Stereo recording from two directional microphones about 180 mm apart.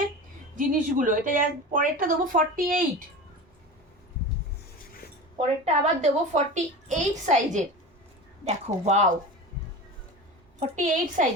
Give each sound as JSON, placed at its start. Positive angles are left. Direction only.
{"t": 0.5, "sound": "speech", "side_deg": -50}
{"t": 5.4, "sound": "a woman's voice", "side_deg": -40}
{"t": 10.6, "sound": "speech", "side_deg": -40}